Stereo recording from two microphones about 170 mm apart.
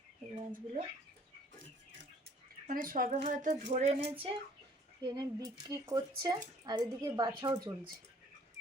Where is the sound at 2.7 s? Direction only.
55° right (ahead or behind).